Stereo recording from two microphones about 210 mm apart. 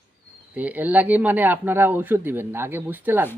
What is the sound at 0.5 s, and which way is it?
Speech, 5° right (ahead or behind).